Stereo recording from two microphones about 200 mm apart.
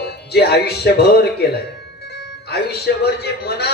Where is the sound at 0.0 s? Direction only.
55° left (ahead or behind).